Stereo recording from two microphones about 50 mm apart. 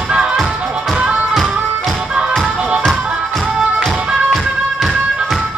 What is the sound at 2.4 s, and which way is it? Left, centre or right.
Music, centre.